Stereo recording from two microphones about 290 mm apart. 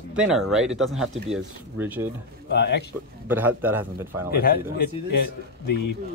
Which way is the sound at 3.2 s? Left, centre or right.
Centre.